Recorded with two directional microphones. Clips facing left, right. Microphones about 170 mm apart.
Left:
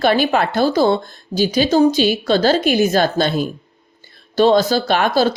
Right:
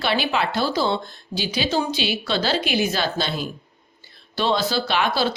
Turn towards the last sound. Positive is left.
turn(degrees=45)  # may be behind; listen again after turning